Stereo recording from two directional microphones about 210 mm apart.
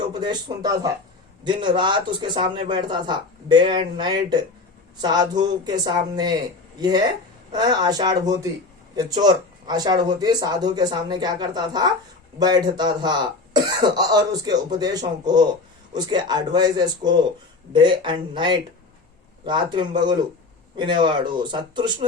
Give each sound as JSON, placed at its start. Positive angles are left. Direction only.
{"t": 0.0, "sound": "speech", "side_deg": -20}
{"t": 7.5, "sound": "speech", "side_deg": -20}